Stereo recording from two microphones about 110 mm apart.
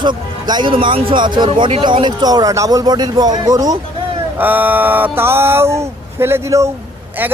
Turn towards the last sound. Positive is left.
turn(degrees=-20)  # may be behind; listen again after turning